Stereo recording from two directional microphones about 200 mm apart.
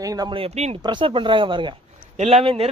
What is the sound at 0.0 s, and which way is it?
Speech, 20° right (ahead or behind).